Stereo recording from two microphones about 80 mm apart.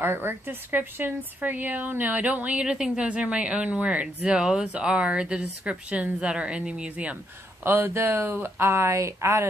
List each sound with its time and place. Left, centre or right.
0.0 s speech: right
7.6 s speech: right